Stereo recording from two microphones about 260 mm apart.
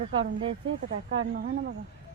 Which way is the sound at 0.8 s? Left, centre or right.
Right.